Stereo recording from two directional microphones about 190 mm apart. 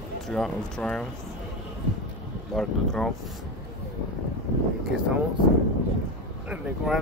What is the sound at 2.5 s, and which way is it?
Speech, 5° left (ahead or behind).